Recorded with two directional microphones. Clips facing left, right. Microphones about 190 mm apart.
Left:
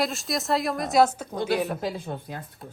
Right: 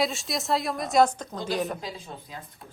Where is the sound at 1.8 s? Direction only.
60° left (ahead or behind).